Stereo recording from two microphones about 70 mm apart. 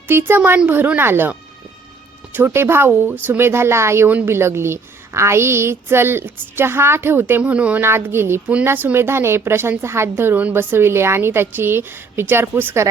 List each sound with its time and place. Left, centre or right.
0.1 s a woman's voice: right
2.5 s a woman's voice: right
7.4 s a woman's voice: centre
7.8 s a woman's voice: right